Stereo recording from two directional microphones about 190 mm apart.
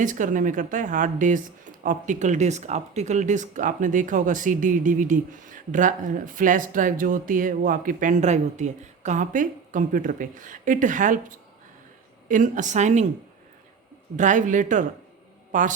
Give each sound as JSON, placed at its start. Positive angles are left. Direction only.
{"t": 0.0, "sound": "a woman's voice", "side_deg": -45}
{"t": 14.2, "sound": "a woman's voice", "side_deg": -40}